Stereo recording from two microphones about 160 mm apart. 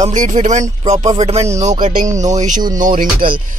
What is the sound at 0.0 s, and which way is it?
Speech, 50° right (ahead or behind).